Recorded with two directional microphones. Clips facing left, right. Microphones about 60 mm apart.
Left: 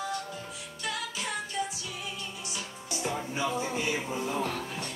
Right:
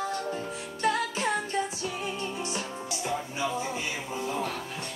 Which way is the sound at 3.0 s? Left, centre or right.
Centre.